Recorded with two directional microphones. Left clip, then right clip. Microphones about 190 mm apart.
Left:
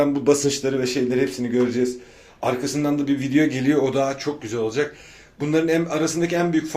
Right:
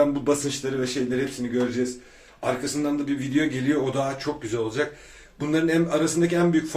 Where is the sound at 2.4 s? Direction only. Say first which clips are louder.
Left 3 dB; 40° left (ahead or behind).